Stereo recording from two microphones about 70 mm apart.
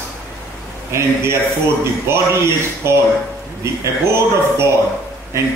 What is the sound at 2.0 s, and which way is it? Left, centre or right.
Speech, right.